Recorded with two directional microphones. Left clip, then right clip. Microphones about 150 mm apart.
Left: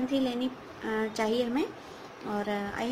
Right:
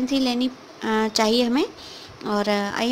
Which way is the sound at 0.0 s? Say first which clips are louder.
Right 7 dB; 65° right (ahead or behind).